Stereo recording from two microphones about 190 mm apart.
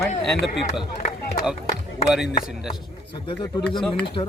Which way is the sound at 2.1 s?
5° right (ahead or behind).